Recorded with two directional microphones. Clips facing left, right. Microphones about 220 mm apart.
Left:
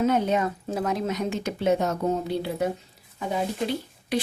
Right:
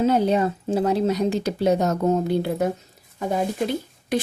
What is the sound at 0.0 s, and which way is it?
A woman's voice, 30° right (ahead or behind).